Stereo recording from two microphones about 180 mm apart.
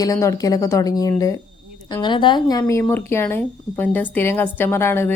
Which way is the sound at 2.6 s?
10° left (ahead or behind).